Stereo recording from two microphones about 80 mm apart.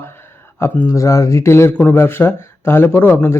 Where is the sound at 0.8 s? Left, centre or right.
Left.